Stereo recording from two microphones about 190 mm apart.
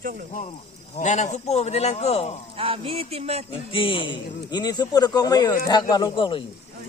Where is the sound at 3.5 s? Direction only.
30° left (ahead or behind).